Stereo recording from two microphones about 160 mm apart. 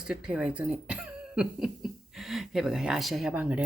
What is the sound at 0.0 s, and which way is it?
A woman's voice, 5° right (ahead or behind).